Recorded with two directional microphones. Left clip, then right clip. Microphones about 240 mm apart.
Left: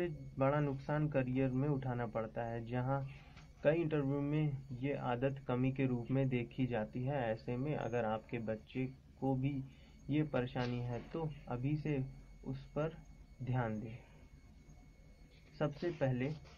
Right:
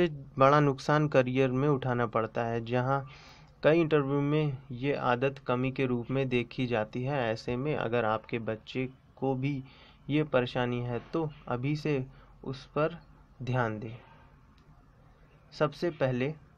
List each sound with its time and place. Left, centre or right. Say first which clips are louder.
0.0 s speech: right 12 dB; right
15.5 s speech: right 9 dB; right